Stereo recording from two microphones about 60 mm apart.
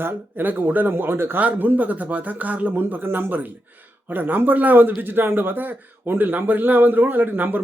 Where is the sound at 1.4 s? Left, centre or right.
Right.